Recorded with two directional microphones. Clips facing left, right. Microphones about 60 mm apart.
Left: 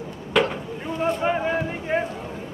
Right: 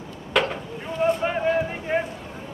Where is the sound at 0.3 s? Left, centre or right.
Centre.